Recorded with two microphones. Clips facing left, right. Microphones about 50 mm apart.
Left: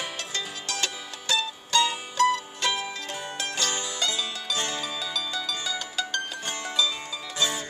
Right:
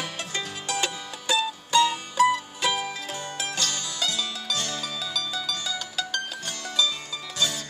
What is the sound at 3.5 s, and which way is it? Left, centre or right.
Music, centre.